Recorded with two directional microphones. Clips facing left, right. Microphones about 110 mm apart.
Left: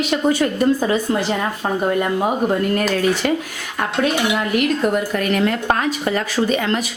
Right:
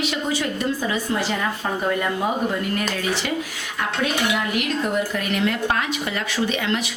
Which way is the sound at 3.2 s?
50° left (ahead or behind).